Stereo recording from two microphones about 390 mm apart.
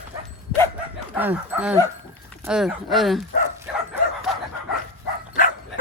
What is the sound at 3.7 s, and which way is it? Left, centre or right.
Bow-wow, centre.